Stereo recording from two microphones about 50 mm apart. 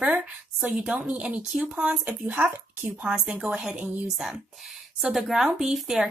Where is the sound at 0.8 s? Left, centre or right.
Centre.